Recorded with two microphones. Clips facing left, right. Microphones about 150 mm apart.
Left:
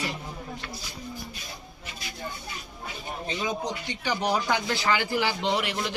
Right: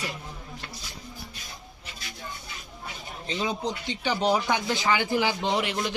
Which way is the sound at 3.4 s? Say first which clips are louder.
Right 3 dB; 30° right (ahead or behind).